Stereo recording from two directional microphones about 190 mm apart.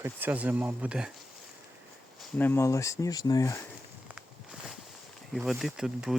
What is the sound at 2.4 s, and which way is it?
Speech, 15° left (ahead or behind).